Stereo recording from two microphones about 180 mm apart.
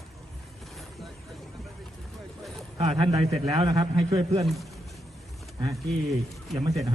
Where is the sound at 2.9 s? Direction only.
30° right (ahead or behind).